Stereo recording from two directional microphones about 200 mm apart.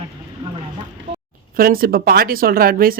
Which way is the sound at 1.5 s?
45° right (ahead or behind).